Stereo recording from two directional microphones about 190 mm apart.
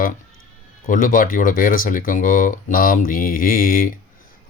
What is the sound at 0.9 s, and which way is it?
Speech, 45° left (ahead or behind).